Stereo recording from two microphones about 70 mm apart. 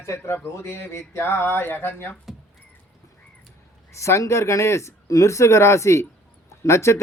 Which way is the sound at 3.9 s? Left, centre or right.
Left.